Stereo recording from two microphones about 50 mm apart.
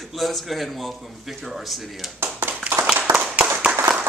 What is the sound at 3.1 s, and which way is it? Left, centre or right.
Clapping, right.